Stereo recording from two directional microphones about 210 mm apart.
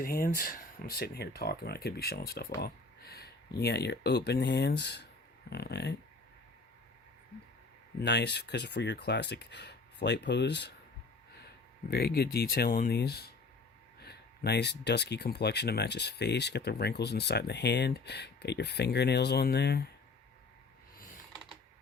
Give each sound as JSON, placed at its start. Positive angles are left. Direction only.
{"t": 0.0, "sound": "speech", "side_deg": 45}
{"t": 8.0, "sound": "speech", "side_deg": 55}
{"t": 11.9, "sound": "speech", "side_deg": 50}